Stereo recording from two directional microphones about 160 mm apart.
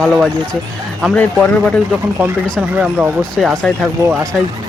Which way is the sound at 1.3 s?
5° left (ahead or behind).